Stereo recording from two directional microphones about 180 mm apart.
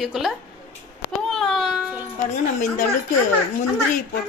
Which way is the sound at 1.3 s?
Centre (ahead or behind).